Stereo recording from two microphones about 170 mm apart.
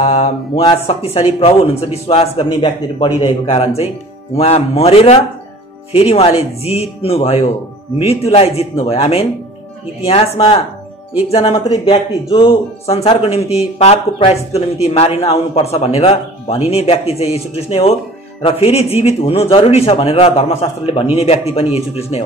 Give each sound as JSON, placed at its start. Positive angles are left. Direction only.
{"t": 0.0, "sound": "speech", "side_deg": 35}